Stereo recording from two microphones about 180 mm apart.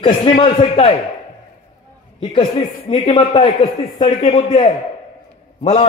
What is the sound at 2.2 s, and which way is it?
A man's voice, 30° left (ahead or behind).